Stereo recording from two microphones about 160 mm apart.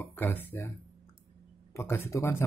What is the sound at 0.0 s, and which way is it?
Speech, 15° left (ahead or behind).